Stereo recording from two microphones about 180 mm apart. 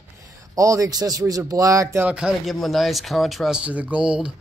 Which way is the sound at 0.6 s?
20° right (ahead or behind).